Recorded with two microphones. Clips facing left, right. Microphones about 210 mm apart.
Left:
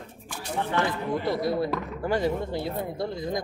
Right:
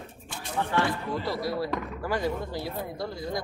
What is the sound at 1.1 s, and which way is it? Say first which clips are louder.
Speech: left 4 dB; 20° left (ahead or behind).